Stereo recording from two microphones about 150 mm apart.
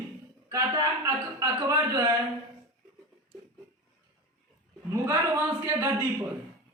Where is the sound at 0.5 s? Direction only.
20° right (ahead or behind).